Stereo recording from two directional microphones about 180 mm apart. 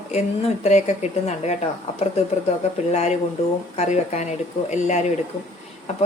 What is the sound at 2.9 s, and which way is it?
Speech, 40° left (ahead or behind).